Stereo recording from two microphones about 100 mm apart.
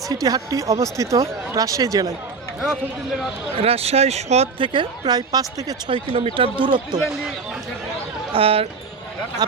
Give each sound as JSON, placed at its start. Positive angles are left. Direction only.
{"t": 0.1, "sound": "speech", "side_deg": -40}
{"t": 3.6, "sound": "speech", "side_deg": -85}
{"t": 4.6, "sound": "a woman's voice", "side_deg": -55}
{"t": 5.9, "sound": "a woman's voice", "side_deg": -55}
{"t": 8.3, "sound": "speech", "side_deg": -70}
{"t": 9.4, "sound": "a woman's voice", "side_deg": -45}